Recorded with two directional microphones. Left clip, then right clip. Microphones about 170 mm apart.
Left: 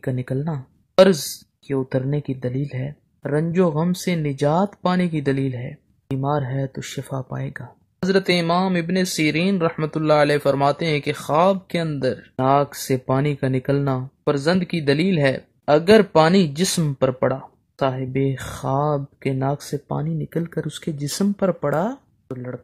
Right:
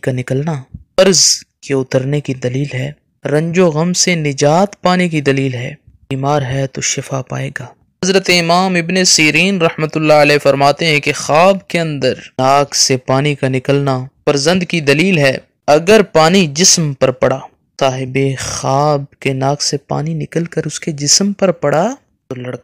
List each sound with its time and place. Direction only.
0.0 s speech: 30° right (ahead or behind)